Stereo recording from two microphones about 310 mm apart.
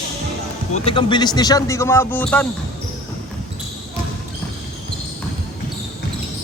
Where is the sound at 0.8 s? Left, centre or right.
Centre.